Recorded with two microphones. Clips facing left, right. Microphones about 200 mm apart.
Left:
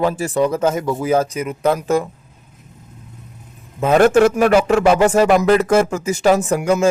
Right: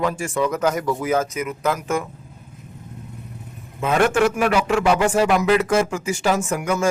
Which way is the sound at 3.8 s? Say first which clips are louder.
Left 6 dB; 40° left (ahead or behind).